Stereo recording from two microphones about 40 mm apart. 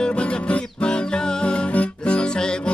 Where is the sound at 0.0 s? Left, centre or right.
Left.